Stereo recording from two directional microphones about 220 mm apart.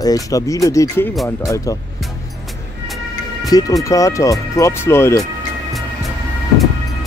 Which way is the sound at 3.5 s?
15° left (ahead or behind).